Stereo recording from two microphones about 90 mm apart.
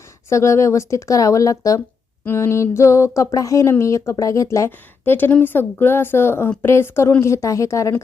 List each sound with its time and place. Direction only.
0.3 s speech: 35° left (ahead or behind)
5.1 s a woman's voice: 20° left (ahead or behind)